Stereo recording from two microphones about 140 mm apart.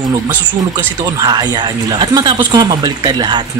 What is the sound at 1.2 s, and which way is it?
Speech, 30° right (ahead or behind).